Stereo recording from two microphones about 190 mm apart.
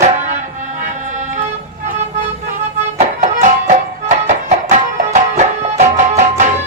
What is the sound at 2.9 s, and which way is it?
Music, 40° right (ahead or behind).